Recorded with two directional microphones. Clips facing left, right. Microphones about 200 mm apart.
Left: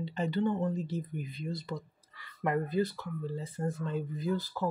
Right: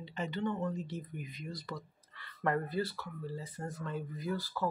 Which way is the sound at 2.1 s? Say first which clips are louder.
Left 2 dB; 15° left (ahead or behind).